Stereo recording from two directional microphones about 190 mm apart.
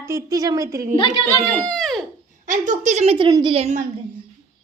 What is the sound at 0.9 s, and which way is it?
Speech, 30° left (ahead or behind).